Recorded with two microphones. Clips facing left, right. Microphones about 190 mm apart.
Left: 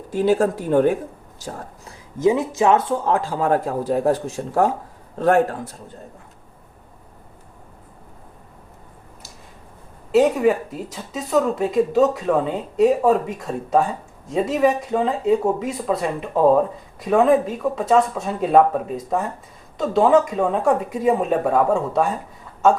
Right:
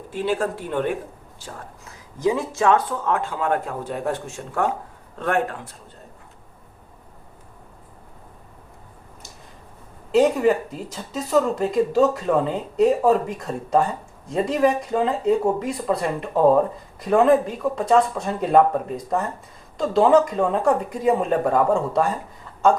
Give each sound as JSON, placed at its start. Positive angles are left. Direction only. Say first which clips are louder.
{"t": 0.1, "sound": "speech", "louder": "left 6 dB", "side_deg": 40}
{"t": 2.1, "sound": "speech", "louder": "left 4 dB", "side_deg": 25}
{"t": 10.1, "sound": "speech", "louder": "left 1 dB", "side_deg": 5}